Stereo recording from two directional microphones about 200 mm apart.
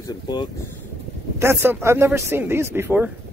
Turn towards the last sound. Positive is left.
turn(degrees=-10)  # may be behind; listen again after turning